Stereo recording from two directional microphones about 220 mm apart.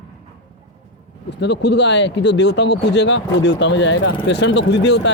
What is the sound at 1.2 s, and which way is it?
Speech, 50° left (ahead or behind).